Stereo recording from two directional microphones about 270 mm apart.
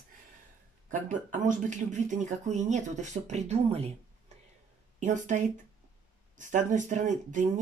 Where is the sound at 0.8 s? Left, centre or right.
Right.